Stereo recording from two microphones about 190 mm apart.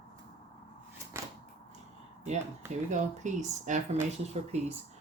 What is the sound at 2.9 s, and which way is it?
Speech, 40° right (ahead or behind).